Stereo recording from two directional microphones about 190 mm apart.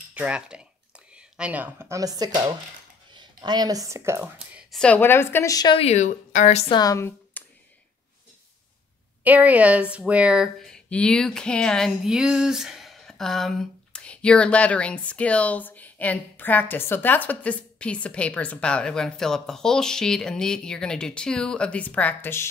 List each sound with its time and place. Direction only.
0.1 s speech: 5° right (ahead or behind); by 6.6 s 40° left (ahead or behind)
6.7 s a woman's voice: 20° left (ahead or behind)
9.2 s speech: 10° right (ahead or behind); by 22.5 s 10° left (ahead or behind)